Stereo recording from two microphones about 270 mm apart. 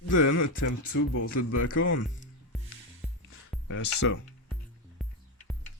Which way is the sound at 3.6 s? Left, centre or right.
Left.